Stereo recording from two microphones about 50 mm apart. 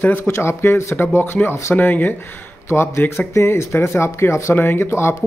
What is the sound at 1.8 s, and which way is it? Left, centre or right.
Speech, left.